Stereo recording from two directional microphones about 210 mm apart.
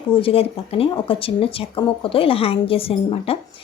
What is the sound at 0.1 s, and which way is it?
A woman's voice, 25° left (ahead or behind).